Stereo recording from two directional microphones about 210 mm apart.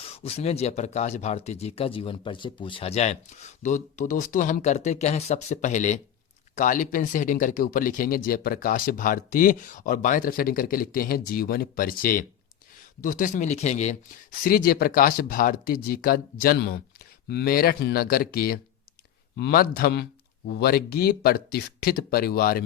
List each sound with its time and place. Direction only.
0.0 s speech: 30° left (ahead or behind); by 22.6 s 45° left (ahead or behind)